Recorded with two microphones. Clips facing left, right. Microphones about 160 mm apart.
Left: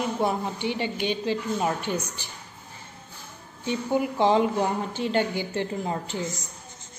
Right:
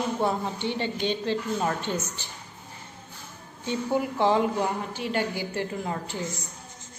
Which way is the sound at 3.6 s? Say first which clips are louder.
Left 1 dB; 20° left (ahead or behind).